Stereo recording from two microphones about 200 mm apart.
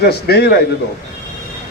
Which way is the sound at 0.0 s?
50° left (ahead or behind).